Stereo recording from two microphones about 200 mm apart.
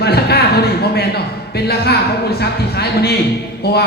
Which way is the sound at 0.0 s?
55° left (ahead or behind).